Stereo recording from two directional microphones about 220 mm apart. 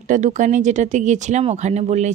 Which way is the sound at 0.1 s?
35° right (ahead or behind).